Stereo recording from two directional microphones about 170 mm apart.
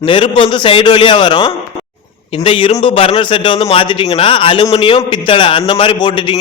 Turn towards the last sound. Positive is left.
turn(degrees=30)  # may be behind; listen again after turning